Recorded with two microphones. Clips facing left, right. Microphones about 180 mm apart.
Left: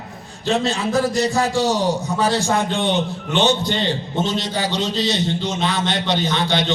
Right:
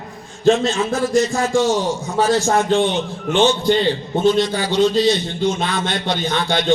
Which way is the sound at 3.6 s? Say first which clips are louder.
Right 5 dB; 45° right (ahead or behind).